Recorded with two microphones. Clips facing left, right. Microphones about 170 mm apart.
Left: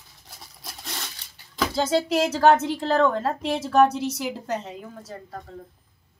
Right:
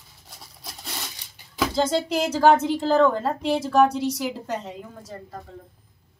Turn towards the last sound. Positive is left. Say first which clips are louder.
# even
turn(degrees=0)  # may be behind; listen again after turning